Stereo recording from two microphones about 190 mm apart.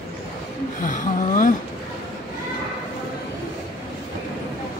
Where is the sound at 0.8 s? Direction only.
45° left (ahead or behind).